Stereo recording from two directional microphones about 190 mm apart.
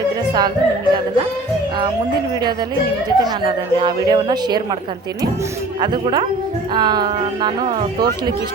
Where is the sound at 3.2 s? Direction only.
25° right (ahead or behind).